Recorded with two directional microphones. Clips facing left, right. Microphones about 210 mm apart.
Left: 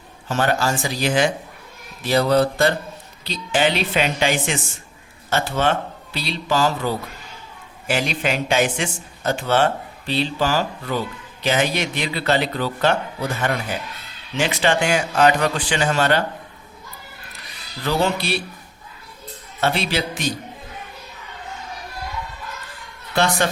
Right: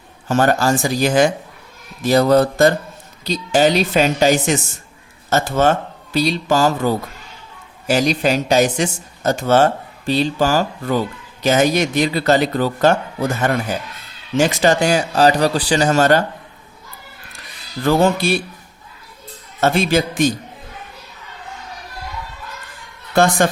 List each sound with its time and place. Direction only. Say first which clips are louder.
0.3 s a man's voice: right 5 dB; 45° right (ahead or behind)
17.8 s speech: right 6 dB; 45° right (ahead or behind)
19.5 s speech: right 6 dB; 45° right (ahead or behind)
23.1 s speech: right 5 dB; 45° right (ahead or behind)